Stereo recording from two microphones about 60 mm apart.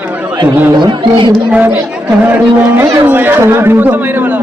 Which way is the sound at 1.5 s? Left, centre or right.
Right.